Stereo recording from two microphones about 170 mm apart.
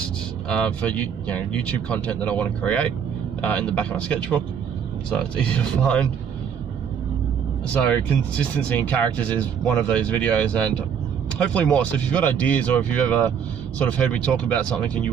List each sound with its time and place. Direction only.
0.5 s speech: 5° left (ahead or behind)
7.6 s speech: 5° left (ahead or behind)